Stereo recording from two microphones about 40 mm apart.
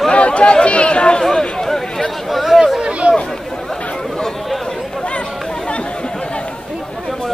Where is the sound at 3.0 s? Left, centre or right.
Right.